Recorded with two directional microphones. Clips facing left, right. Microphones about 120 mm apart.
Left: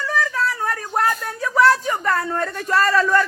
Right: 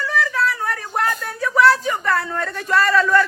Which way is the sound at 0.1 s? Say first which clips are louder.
Right 1 dB; 35° left (ahead or behind).